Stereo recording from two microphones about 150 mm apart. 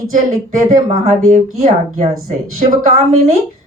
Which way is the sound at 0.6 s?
50° right (ahead or behind).